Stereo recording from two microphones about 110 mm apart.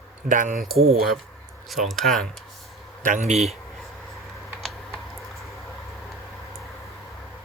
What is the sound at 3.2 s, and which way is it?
Speech, 85° right.